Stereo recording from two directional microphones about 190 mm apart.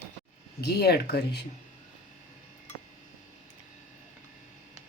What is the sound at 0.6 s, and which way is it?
Speech, 55° left (ahead or behind).